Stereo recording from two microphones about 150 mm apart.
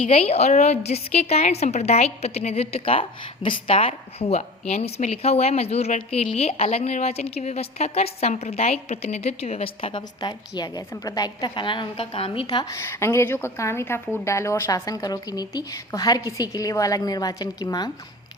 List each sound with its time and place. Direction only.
0.1 s a woman's voice: 40° left (ahead or behind); by 17.9 s 25° left (ahead or behind)